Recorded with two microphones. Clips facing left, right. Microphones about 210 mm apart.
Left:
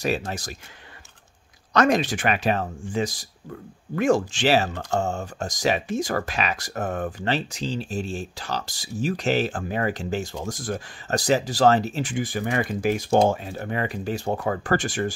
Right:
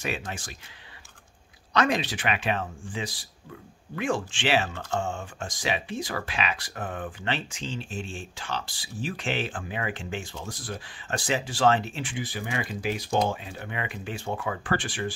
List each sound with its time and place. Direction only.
0.0 s speech: 40° left (ahead or behind)
1.7 s speech: 45° left (ahead or behind)